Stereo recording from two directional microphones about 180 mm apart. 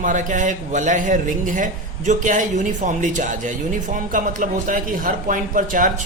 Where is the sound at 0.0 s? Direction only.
45° right (ahead or behind).